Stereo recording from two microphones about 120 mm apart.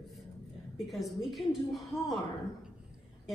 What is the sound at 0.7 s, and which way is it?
A woman's voice, centre (ahead or behind).